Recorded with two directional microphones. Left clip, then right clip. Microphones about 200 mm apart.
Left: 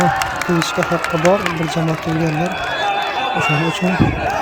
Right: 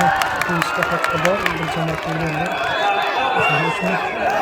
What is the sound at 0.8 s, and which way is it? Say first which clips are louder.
Speech: left 1 dB; 35° right (ahead or behind).